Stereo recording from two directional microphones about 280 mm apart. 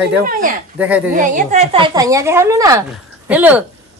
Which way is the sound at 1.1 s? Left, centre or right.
Right.